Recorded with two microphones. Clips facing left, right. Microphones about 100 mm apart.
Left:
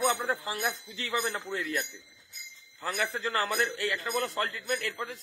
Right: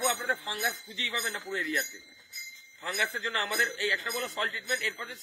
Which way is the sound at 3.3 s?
50° left (ahead or behind).